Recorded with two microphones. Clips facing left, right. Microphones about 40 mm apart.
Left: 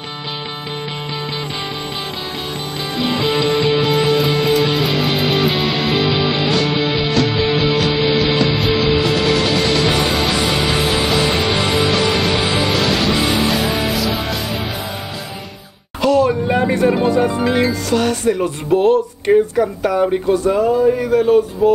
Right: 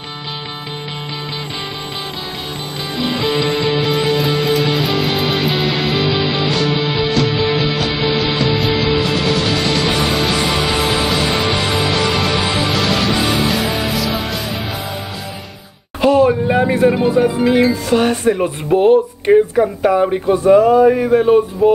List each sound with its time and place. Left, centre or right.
3.7 s music: centre
16.0 s a sound: right
16.4 s speech: centre
17.8 s speech: right
18.7 s speech: centre
20.8 s speech: right
21.2 s speech: right